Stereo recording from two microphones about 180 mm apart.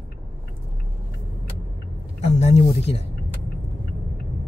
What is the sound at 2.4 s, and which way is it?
Speech, 35° left (ahead or behind).